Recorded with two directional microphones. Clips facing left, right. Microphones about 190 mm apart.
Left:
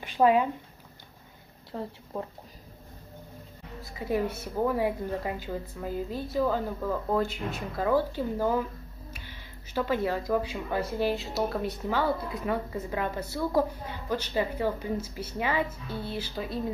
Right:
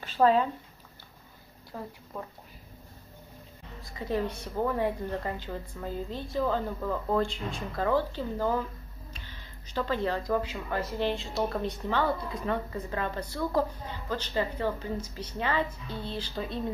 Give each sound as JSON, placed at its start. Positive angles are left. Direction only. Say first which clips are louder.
{"t": 0.0, "sound": "speech", "louder": "left 1 dB", "side_deg": 15}
{"t": 1.7, "sound": "speech", "louder": "left 4 dB", "side_deg": 25}
{"t": 3.8, "sound": "speech", "louder": "left 2 dB", "side_deg": 10}